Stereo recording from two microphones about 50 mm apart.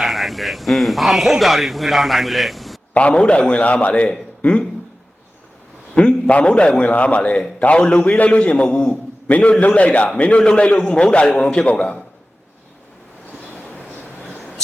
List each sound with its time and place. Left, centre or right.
0.0 s speech: centre
2.9 s a man's voice: left
5.9 s a man's voice: left